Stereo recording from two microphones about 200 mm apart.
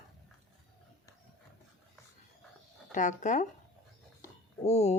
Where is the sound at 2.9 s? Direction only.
40° left (ahead or behind).